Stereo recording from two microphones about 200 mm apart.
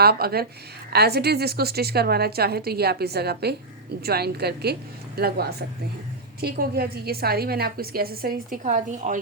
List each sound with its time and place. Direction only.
0.0 s a woman's voice: 50° right (ahead or behind)